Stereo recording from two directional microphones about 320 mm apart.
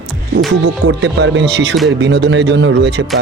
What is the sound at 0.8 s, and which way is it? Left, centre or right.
Speech, right.